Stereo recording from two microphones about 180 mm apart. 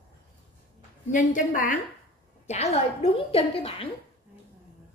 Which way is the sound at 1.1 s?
45° left (ahead or behind).